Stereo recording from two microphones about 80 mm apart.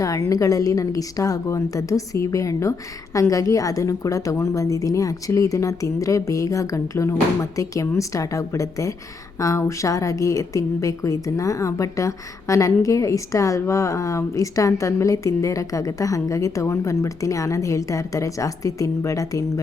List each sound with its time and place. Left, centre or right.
0.0 s a woman's voice: left